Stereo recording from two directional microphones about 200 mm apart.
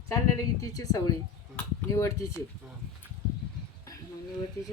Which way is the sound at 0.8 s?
20° left (ahead or behind).